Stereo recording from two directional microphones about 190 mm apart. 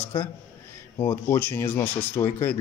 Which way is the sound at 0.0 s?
30° left (ahead or behind).